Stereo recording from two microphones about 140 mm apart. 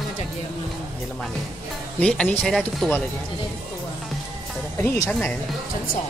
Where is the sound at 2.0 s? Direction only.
10° left (ahead or behind).